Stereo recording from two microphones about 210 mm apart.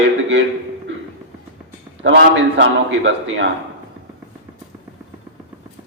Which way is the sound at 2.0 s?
60° right (ahead or behind).